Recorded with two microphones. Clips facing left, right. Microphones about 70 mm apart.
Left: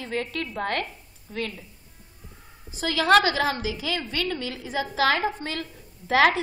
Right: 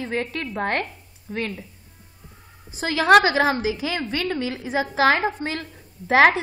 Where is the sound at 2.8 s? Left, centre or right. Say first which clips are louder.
Right 4 dB; right.